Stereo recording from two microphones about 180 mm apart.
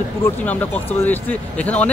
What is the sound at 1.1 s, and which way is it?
Speech, 10° left (ahead or behind).